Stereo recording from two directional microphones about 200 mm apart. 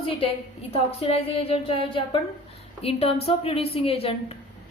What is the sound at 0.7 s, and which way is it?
A woman's voice, 30° left (ahead or behind).